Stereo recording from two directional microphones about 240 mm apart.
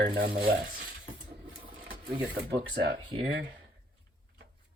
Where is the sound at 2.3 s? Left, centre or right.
Right.